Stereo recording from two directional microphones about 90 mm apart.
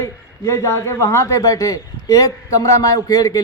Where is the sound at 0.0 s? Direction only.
35° left (ahead or behind).